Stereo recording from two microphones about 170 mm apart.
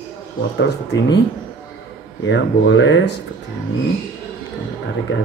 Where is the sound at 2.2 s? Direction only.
90° left.